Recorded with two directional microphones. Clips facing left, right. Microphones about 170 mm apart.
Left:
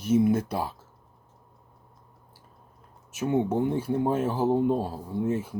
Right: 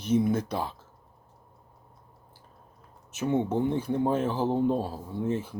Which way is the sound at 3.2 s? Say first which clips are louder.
Left 1 dB; 10° left (ahead or behind).